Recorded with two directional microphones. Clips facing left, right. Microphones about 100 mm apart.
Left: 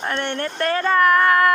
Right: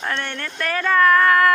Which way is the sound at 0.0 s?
25° left (ahead or behind).